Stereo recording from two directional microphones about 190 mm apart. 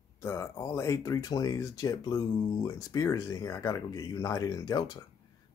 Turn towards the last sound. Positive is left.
turn(degrees=20)  # may be behind; listen again after turning